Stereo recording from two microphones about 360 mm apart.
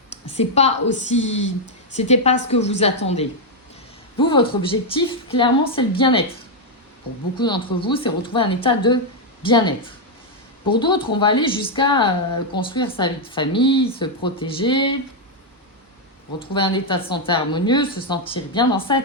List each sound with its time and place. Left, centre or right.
0.3 s a woman's voice: centre
7.3 s speech: centre
10.8 s speech: centre
16.4 s speech: centre